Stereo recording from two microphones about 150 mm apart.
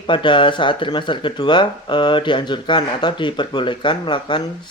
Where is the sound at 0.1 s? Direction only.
35° left (ahead or behind).